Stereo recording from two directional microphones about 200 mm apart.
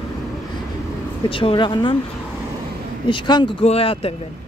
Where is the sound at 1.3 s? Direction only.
25° left (ahead or behind).